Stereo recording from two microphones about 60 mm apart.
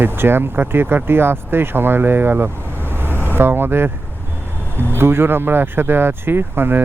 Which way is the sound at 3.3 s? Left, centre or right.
Right.